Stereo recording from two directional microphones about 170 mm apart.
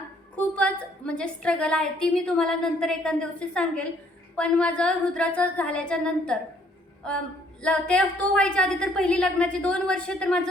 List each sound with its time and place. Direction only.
0.3 s a woman's voice: 5° left (ahead or behind)
7.6 s a woman's voice: 5° left (ahead or behind)